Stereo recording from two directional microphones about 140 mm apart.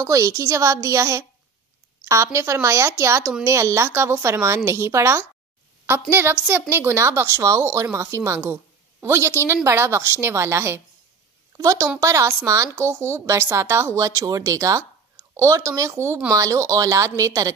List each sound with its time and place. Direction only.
0.0 s speech: 25° right (ahead or behind)
2.3 s a woman's voice: 20° right (ahead or behind)